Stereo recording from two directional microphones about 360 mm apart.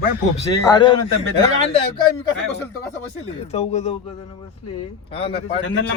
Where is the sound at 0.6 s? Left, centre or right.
Centre.